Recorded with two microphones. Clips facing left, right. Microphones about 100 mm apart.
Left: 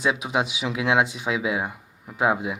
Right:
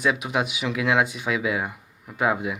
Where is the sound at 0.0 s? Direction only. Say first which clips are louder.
Even; 20° left (ahead or behind).